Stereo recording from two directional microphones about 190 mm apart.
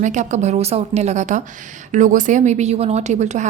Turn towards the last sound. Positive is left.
turn(degrees=-40)  # may be behind; listen again after turning